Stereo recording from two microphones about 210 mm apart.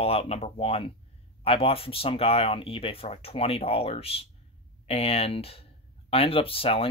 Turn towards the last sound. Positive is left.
turn(degrees=25)  # may be behind; listen again after turning